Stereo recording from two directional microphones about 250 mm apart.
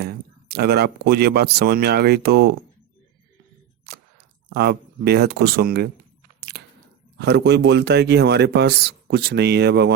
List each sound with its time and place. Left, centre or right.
0.0 s speech: right
3.9 s a sound: right
4.4 s speech: right
6.5 s biting: right
7.2 s speech: right